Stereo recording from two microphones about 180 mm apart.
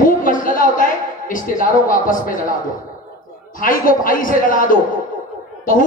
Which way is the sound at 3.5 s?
50° left (ahead or behind).